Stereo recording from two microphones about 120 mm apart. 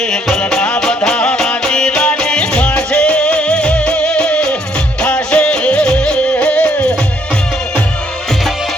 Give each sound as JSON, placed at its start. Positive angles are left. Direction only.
{"t": 0.0, "sound": "music", "side_deg": 5}